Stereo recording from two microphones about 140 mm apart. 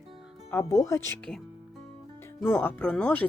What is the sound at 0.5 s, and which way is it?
Speech, 25° left (ahead or behind).